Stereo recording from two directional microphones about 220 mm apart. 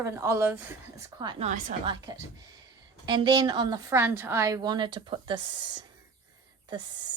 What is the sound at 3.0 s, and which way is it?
A woman's voice, 20° right (ahead or behind).